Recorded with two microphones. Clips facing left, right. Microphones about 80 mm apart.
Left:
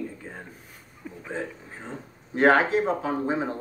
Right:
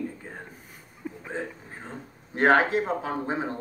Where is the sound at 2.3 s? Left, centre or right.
Right.